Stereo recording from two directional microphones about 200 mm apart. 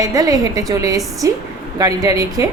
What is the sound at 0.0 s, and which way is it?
A woman's voice, 15° right (ahead or behind).